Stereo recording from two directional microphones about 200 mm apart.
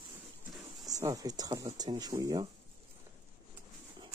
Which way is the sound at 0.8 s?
15° right (ahead or behind).